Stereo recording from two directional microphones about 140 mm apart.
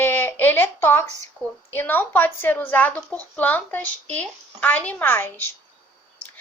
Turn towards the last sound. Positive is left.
turn(degrees=15)  # may be behind; listen again after turning